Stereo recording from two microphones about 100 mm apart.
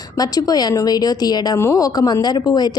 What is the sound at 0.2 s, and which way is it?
A woman's voice, 40° left (ahead or behind).